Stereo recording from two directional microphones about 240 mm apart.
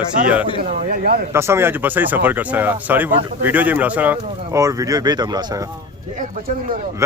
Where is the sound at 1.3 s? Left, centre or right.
Centre.